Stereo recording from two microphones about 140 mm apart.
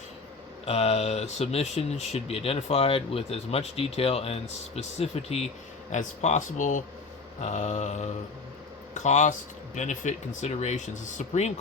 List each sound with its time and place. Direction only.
0.6 s speech: 45° left (ahead or behind)
5.9 s speech: 60° left (ahead or behind)